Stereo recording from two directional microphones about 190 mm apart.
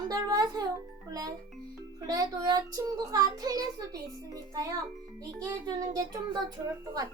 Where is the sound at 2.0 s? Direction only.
20° right (ahead or behind).